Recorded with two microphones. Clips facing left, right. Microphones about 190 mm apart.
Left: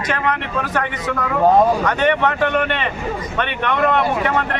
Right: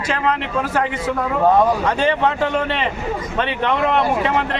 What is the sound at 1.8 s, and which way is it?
Speech, 30° right (ahead or behind).